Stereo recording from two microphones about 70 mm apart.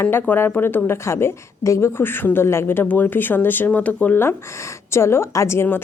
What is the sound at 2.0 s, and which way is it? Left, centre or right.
Speech, left.